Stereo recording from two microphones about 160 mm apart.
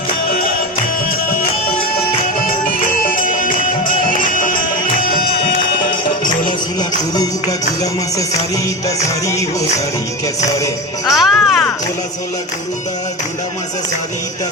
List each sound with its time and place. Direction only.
3.0 s music: 60° left (ahead or behind)
9.0 s music: 20° left (ahead or behind)
11.1 s speech: centre (ahead or behind)